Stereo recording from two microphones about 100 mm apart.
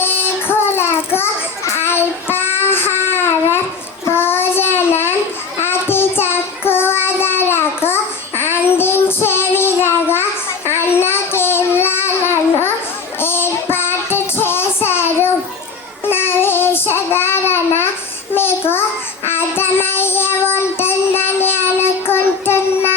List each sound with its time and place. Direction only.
0.8 s child singing: 25° left (ahead or behind)
19.2 s child singing: 25° left (ahead or behind)